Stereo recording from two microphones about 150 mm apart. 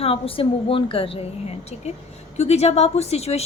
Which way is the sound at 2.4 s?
45° left (ahead or behind).